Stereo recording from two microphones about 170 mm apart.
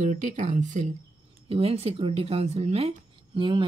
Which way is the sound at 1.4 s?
35° right (ahead or behind).